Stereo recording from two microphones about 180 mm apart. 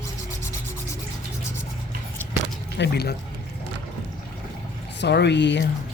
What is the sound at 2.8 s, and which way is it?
Speech, 60° left (ahead or behind).